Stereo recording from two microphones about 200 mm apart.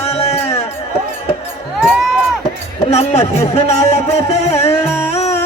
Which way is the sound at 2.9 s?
30° left (ahead or behind).